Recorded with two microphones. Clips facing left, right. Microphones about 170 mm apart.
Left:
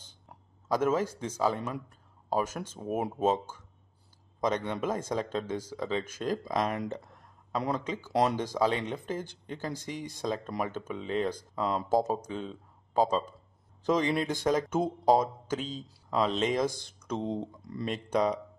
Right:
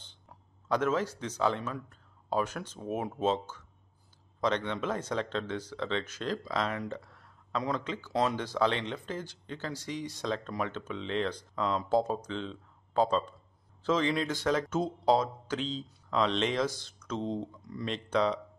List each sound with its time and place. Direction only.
0.7 s speech: 10° left (ahead or behind)
9.8 s speech: 50° left (ahead or behind)
10.2 s speech: 10° left (ahead or behind)
11.7 s speech: 35° left (ahead or behind)
12.1 s speech: 10° left (ahead or behind)